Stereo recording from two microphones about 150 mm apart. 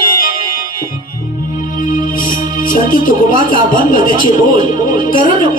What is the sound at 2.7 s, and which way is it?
Speech, 65° left (ahead or behind).